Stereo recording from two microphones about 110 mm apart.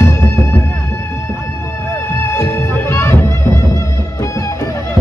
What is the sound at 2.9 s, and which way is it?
Music, 25° left (ahead or behind).